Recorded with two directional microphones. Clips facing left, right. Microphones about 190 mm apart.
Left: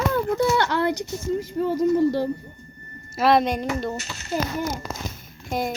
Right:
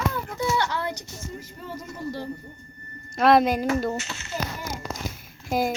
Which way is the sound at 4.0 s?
35° left (ahead or behind).